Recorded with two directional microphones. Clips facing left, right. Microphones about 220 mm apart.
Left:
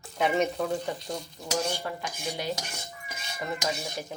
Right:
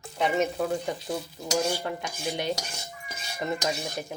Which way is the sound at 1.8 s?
20° right (ahead or behind).